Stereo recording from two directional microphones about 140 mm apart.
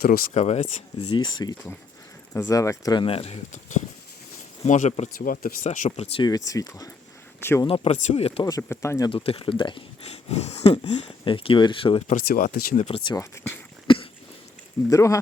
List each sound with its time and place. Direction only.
0.0 s speech: 90° left
0.3 s speech: 55° left (ahead or behind)
1.0 s speech: 35° left (ahead or behind); by 5.1 s 60° left (ahead or behind)
5.1 s speech: 90° left
5.6 s speech: 70° left (ahead or behind)
6.2 s speech: 25° left (ahead or behind)
7.7 s speech: 55° left (ahead or behind)
8.4 s speech: 20° left (ahead or behind)
9.0 s speech: 40° left (ahead or behind)
10.2 s speech: 50° left (ahead or behind)
12.0 s speech: 75° left (ahead or behind)
13.1 s speech: 20° left (ahead or behind)
13.8 s cough: 35° left (ahead or behind)
14.8 s speech: 20° left (ahead or behind)